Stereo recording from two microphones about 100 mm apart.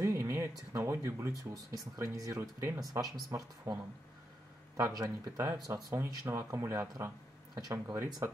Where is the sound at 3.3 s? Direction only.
35° right (ahead or behind).